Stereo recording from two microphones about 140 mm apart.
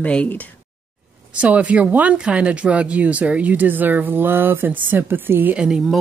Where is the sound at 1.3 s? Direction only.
10° right (ahead or behind).